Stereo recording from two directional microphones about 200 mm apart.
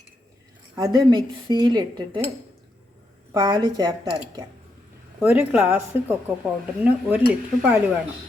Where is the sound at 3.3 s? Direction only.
20° right (ahead or behind).